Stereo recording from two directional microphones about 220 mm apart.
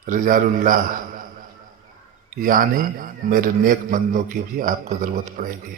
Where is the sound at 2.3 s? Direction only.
40° right (ahead or behind).